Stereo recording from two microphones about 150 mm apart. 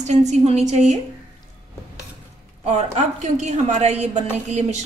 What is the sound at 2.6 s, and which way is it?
A woman's voice, 50° right (ahead or behind).